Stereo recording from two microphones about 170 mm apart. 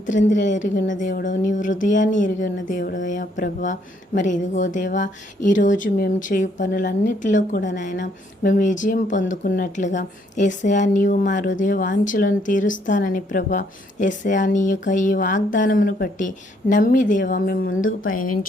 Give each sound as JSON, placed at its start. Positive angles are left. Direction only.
{"t": 0.1, "sound": "a woman's voice", "side_deg": 45}